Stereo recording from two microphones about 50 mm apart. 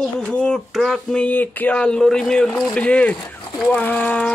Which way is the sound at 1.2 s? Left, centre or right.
Left.